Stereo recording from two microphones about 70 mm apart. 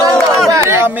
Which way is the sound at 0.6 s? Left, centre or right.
Right.